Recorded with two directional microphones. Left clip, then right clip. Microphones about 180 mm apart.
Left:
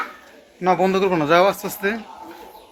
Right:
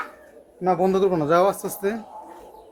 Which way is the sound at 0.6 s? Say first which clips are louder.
Left 2 dB; 10° right (ahead or behind).